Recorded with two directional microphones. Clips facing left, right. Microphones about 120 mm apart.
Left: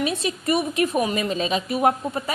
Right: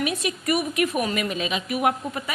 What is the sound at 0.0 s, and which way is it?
A woman's voice, 30° left (ahead or behind).